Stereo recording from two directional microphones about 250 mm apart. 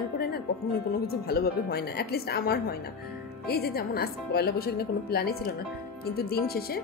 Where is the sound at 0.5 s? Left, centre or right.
Left.